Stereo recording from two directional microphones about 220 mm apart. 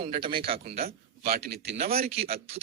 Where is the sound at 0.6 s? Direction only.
45° right (ahead or behind).